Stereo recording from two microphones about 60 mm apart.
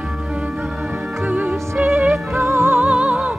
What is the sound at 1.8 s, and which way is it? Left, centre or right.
Music, right.